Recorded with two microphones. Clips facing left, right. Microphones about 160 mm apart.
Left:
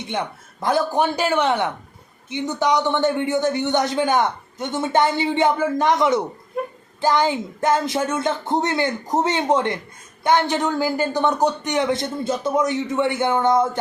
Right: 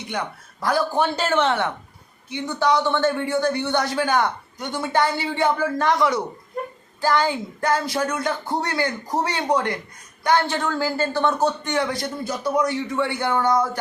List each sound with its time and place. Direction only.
0.1 s a man's voice: 25° left (ahead or behind)